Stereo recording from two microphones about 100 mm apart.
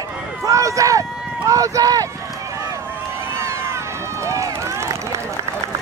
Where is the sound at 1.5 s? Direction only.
35° right (ahead or behind).